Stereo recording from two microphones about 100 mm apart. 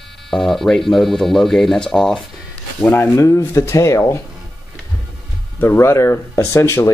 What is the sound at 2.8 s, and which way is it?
Speech, 20° left (ahead or behind).